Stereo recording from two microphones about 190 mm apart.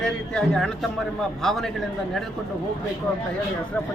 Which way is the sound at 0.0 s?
Centre (ahead or behind).